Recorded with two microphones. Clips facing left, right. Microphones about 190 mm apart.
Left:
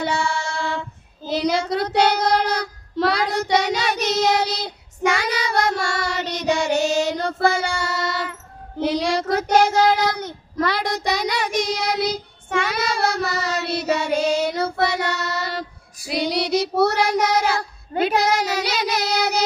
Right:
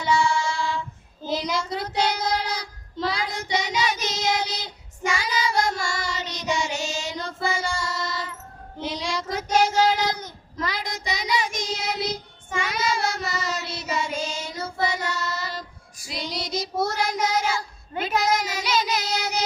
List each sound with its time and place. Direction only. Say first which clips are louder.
0.0 s female singing: right 1 dB; 65° left (ahead or behind)
1.3 s child singing: left 6 dB; 65° left (ahead or behind)